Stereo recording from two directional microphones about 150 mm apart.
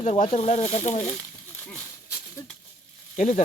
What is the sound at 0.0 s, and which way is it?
Speech, 45° left (ahead or behind).